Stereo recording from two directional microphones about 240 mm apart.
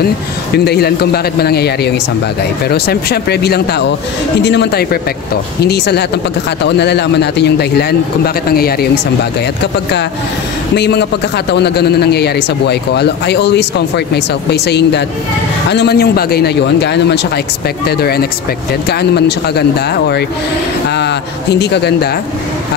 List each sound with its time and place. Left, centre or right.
0.7 s a man's voice: left
10.8 s a man's voice: left